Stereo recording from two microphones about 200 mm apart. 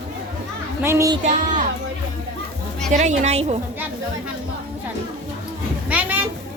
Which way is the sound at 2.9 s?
35° right (ahead or behind).